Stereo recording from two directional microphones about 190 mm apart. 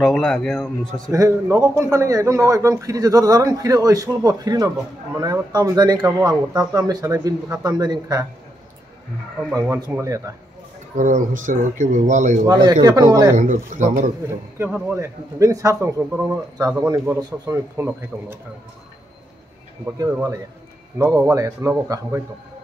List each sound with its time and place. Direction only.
0.0 s speech: 5° left (ahead or behind)
1.1 s a man's voice: 15° right (ahead or behind)
9.6 s a man's voice: 20° right (ahead or behind)
11.0 s speech: 40° right (ahead or behind)
12.8 s a man's voice: 20° right (ahead or behind)
13.4 s speech: 40° right (ahead or behind)
14.6 s a man's voice: 10° right (ahead or behind)
21.0 s a man's voice: 15° right (ahead or behind)